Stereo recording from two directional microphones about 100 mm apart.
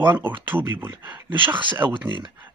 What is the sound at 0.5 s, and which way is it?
Speech, 20° right (ahead or behind).